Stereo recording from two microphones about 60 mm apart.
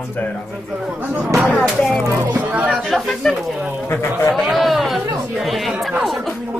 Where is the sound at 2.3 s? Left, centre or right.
Right.